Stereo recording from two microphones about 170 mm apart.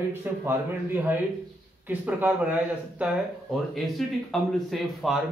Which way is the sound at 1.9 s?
10° right (ahead or behind).